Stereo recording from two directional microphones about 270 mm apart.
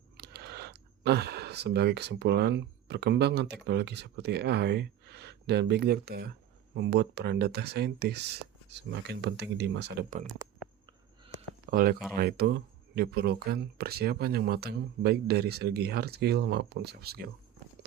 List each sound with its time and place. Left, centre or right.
0.2 s speech: right
11.7 s speech: right